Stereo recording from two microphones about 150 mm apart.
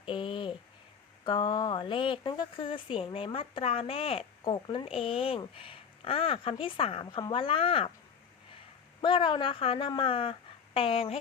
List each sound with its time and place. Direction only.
0.0 s a sound: 35° left (ahead or behind)
1.2 s speech: 30° left (ahead or behind)
9.0 s speech: 35° left (ahead or behind)